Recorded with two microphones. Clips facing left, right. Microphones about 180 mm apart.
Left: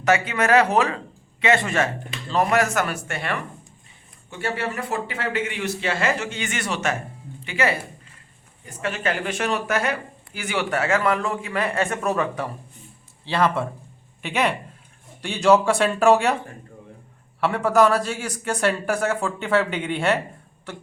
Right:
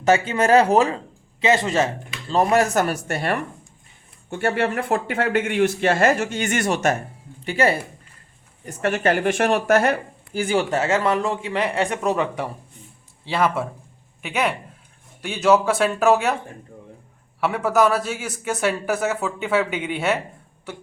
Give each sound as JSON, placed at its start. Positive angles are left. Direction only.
{"t": 0.0, "sound": "speech", "side_deg": -30}
{"t": 4.3, "sound": "speech", "side_deg": -55}
{"t": 7.4, "sound": "speech", "side_deg": -35}
{"t": 8.6, "sound": "speech", "side_deg": -45}
{"t": 10.3, "sound": "speech", "side_deg": -30}
{"t": 13.2, "sound": "speech", "side_deg": -5}
{"t": 17.4, "sound": "speech", "side_deg": -5}